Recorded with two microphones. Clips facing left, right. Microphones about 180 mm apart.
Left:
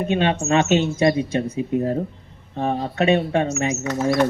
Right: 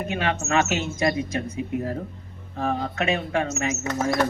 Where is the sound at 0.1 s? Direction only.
30° left (ahead or behind).